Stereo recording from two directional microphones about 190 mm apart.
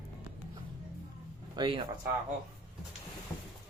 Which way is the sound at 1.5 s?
25° right (ahead or behind).